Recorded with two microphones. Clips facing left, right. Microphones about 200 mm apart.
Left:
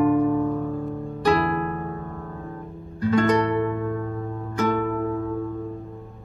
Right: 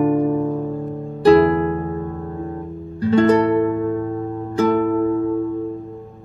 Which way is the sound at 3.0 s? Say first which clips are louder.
Right 5 dB; 30° right (ahead or behind).